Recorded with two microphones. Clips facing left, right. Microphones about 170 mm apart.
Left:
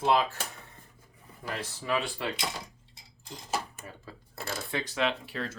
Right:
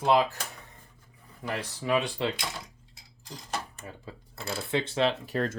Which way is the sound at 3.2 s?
5° left (ahead or behind).